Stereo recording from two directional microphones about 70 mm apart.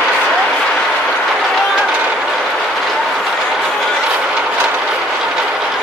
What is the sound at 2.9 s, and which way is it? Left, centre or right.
Train, centre.